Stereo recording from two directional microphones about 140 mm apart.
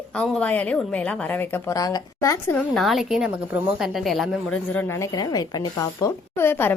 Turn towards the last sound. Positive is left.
turn(degrees=15)  # may be behind; listen again after turning